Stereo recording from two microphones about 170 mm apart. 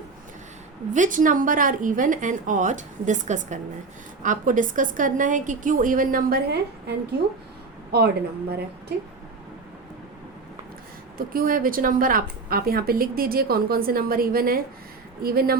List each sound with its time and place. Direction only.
0.9 s a woman's voice: 50° right (ahead or behind); by 6.9 s 65° right (ahead or behind)
7.9 s a woman's voice: 65° right (ahead or behind)
11.2 s a woman's voice: 55° right (ahead or behind)